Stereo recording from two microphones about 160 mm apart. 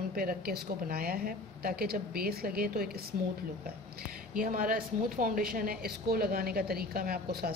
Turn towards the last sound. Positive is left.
turn(degrees=-70)  # may be behind; listen again after turning